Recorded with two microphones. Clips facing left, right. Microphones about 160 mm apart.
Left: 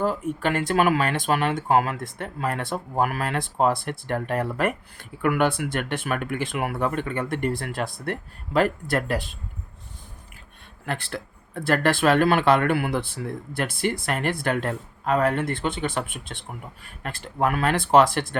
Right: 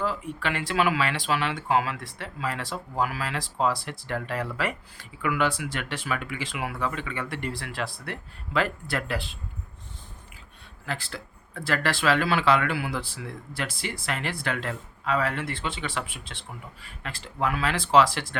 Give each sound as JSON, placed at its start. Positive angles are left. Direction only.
{"t": 0.0, "sound": "speech", "side_deg": 45}
{"t": 10.8, "sound": "speech", "side_deg": 55}